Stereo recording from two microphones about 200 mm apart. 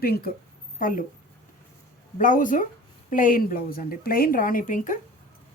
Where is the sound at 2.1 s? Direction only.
40° left (ahead or behind).